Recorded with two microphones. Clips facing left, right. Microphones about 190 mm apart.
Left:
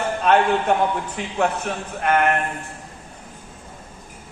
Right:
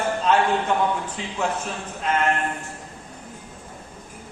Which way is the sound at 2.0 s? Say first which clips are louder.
Left 4 dB; 60° left (ahead or behind).